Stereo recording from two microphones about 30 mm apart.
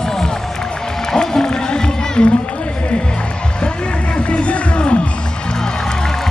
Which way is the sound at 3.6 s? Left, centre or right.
Left.